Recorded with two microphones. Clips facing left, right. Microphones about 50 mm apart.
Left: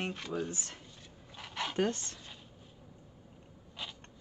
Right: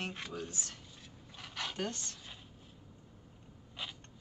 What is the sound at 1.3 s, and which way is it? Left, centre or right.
Dog, centre.